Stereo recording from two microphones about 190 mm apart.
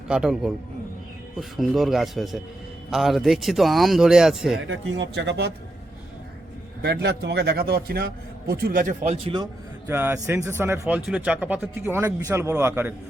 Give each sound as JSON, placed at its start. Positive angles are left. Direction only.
{"t": 0.1, "sound": "a man's voice", "side_deg": -5}
{"t": 4.6, "sound": "speech", "side_deg": -80}
{"t": 6.8, "sound": "a man's voice", "side_deg": -60}
{"t": 9.2, "sound": "a man's voice", "side_deg": -20}